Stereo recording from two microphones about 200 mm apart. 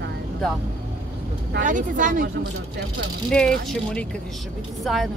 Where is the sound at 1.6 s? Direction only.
40° right (ahead or behind).